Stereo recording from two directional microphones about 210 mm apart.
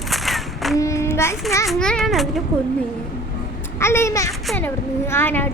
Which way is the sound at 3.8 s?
10° left (ahead or behind).